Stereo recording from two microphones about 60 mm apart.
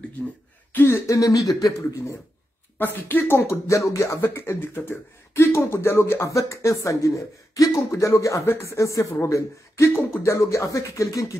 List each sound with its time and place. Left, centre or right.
0.7 s speech: left
1.1 s speech: left
2.8 s a woman's voice: left
3.3 s speech: left
6.3 s speech: left
10.3 s speech: left